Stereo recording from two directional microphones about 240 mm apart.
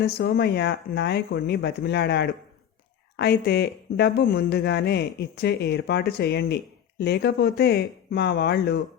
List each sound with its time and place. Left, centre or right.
0.0 s speech: left